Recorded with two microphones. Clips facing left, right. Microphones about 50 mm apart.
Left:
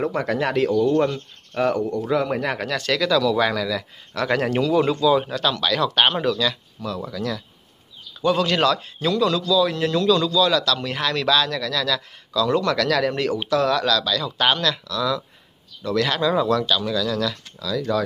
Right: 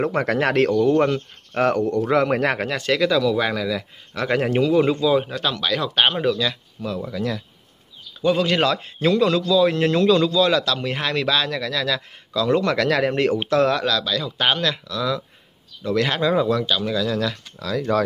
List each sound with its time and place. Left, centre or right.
0.0 s speech: right
2.7 s a man's voice: right
13.7 s a man's voice: centre
17.6 s speech: right